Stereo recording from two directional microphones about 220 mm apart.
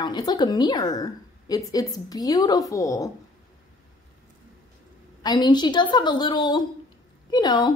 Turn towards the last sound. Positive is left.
turn(degrees=20)  # may be behind; listen again after turning